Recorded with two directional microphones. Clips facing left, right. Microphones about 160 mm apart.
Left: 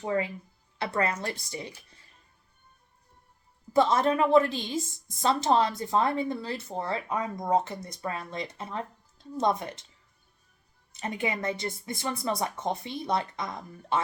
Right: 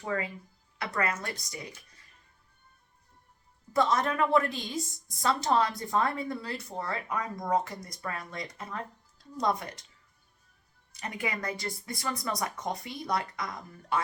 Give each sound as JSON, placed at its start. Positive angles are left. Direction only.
{"t": 0.0, "sound": "a woman's voice", "side_deg": 20}
{"t": 3.7, "sound": "a woman's voice", "side_deg": 30}
{"t": 10.9, "sound": "a woman's voice", "side_deg": 25}